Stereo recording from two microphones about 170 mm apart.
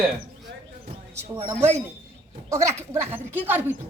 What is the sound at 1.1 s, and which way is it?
Speech, 15° right (ahead or behind).